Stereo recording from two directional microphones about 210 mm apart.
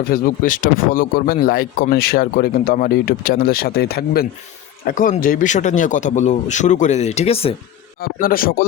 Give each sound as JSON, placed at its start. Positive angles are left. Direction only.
{"t": 0.1, "sound": "speech", "side_deg": 40}
{"t": 8.0, "sound": "speech", "side_deg": 45}